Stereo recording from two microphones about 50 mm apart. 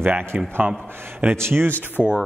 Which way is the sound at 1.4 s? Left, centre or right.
Right.